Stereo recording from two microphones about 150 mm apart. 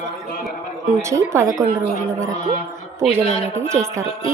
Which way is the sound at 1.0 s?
20° right (ahead or behind).